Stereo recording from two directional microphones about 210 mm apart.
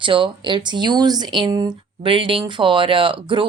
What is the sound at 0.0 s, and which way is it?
Speech, 25° right (ahead or behind).